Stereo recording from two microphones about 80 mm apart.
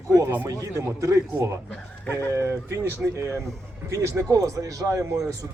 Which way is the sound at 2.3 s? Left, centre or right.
Right.